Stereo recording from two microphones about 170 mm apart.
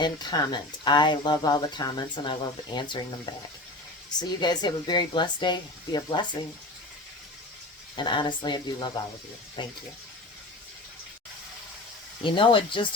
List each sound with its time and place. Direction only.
0.0 s speech: 25° left (ahead or behind)
7.9 s speech: 25° left (ahead or behind)
12.2 s speech: 30° left (ahead or behind)